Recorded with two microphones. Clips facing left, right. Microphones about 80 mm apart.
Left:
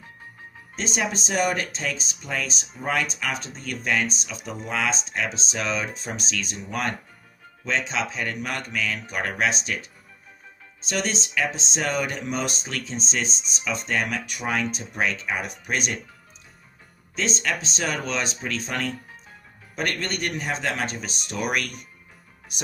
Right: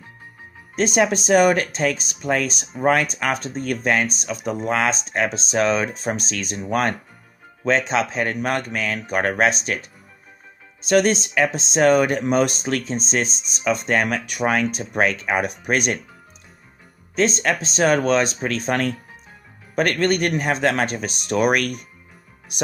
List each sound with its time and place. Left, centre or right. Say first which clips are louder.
0.8 s speech: right 9 dB; right
17.2 s speech: right 7 dB; right